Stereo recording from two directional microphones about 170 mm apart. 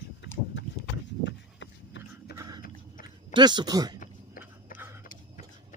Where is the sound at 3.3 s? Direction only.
25° right (ahead or behind).